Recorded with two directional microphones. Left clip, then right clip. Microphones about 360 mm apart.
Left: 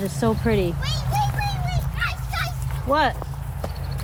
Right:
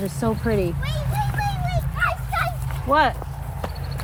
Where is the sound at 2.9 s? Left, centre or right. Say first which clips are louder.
Right 2 dB; centre.